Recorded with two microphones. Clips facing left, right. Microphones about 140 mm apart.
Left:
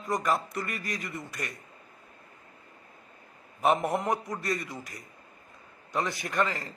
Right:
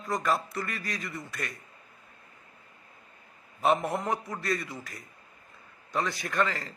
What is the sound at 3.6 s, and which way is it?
A man's voice, 15° left (ahead or behind).